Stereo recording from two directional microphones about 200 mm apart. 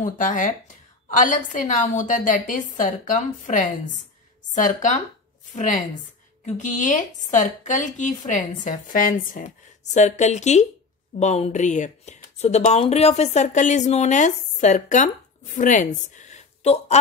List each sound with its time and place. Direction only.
0.0 s a woman's voice: 40° left (ahead or behind)